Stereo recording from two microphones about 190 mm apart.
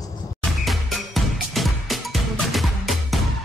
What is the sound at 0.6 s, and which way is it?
Music, centre (ahead or behind).